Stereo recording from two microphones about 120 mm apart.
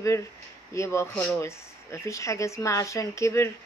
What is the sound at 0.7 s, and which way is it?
Speech, 25° left (ahead or behind).